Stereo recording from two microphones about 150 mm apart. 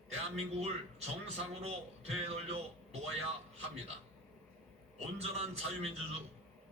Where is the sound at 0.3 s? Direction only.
45° right (ahead or behind).